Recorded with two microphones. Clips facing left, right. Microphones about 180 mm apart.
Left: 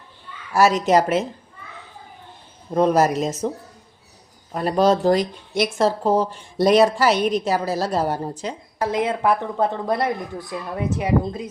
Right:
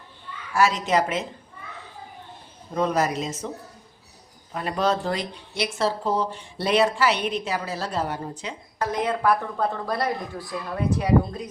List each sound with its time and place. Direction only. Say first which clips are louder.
0.5 s speech: left 5 dB; 40° left (ahead or behind)
2.7 s speech: left 6 dB; 40° left (ahead or behind)
4.5 s speech: left 6 dB; 40° left (ahead or behind)
9.0 s speech: left 2 dB; 25° left (ahead or behind)